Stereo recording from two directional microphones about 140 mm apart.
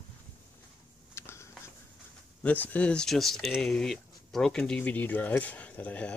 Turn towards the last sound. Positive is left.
turn(degrees=10)  # may be behind; listen again after turning